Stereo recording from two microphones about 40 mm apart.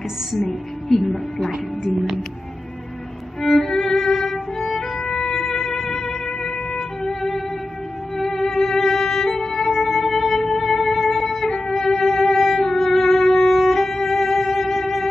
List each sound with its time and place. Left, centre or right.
0.3 s a woman's voice: centre
1.5 s speech: centre
3.3 s violin: centre
4.9 s music: centre